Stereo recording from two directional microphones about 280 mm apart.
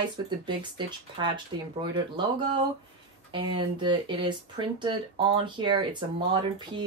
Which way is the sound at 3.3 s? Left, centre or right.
Centre.